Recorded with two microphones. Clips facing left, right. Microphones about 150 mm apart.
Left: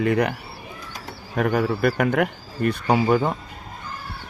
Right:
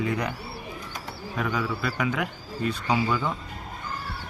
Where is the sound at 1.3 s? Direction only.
55° left (ahead or behind).